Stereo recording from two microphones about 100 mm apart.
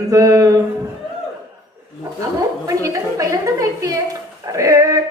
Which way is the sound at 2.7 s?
35° right (ahead or behind).